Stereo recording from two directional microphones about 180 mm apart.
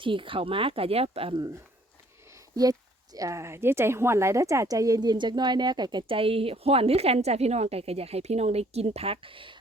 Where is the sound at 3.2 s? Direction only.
15° right (ahead or behind).